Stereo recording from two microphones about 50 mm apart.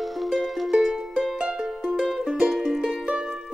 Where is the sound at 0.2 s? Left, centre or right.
Centre.